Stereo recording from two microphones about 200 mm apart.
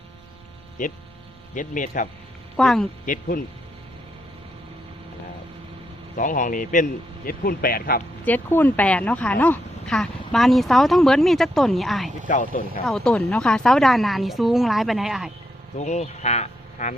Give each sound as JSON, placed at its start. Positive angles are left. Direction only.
{"t": 0.8, "sound": "a man's voice", "side_deg": 40}
{"t": 2.6, "sound": "speech", "side_deg": 0}
{"t": 3.1, "sound": "a man's voice", "side_deg": 45}
{"t": 6.1, "sound": "a man's voice", "side_deg": 40}
{"t": 8.2, "sound": "speech", "side_deg": 10}
{"t": 12.3, "sound": "a man's voice", "side_deg": 45}
{"t": 12.8, "sound": "speech", "side_deg": 5}
{"t": 15.8, "sound": "speech", "side_deg": 35}